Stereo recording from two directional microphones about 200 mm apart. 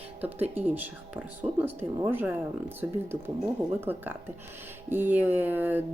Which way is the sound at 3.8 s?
10° right (ahead or behind).